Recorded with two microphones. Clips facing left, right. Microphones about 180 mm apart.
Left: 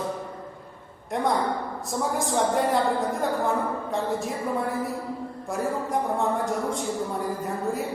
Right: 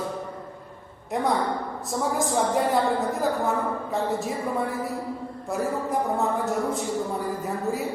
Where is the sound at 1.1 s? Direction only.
Centre (ahead or behind).